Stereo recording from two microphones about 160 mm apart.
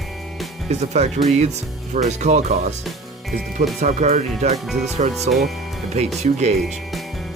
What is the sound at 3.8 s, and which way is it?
Speech, 45° right (ahead or behind).